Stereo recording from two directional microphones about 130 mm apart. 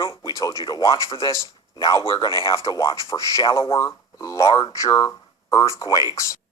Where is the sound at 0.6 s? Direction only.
30° left (ahead or behind).